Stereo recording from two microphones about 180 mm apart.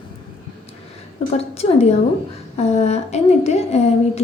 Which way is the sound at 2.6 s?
35° left (ahead or behind).